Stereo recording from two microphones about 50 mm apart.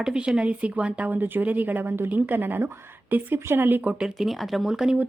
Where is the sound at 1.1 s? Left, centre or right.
Right.